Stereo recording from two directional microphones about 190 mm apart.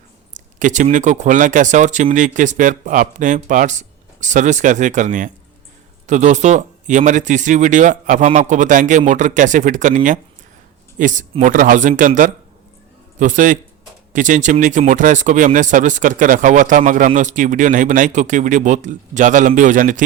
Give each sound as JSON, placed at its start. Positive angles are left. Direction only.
{"t": 0.3, "sound": "speech", "side_deg": -40}